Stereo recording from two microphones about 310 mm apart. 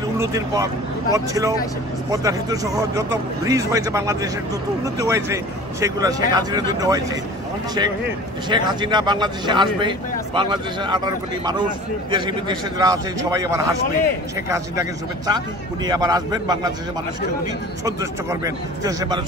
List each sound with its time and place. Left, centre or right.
0.2 s speech: centre
8.5 s speech: centre
17.8 s speech: centre